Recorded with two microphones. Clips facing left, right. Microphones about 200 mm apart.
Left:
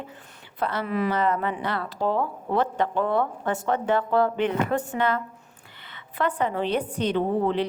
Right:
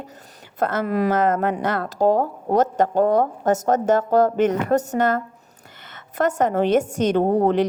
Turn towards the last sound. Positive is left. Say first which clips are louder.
# right 6 dB
turn(degrees=-45)  # may be behind; listen again after turning